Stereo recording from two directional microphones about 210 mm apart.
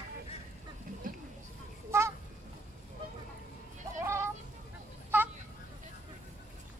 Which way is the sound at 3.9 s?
10° right (ahead or behind).